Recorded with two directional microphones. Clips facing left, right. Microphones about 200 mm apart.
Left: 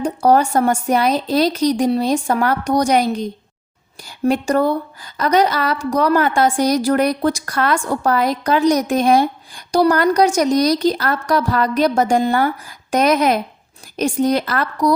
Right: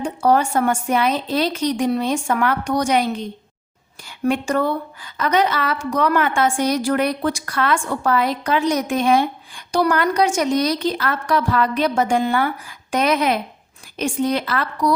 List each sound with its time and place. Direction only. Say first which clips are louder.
0.0 s a woman's voice: left 3 dB; 40° left (ahead or behind)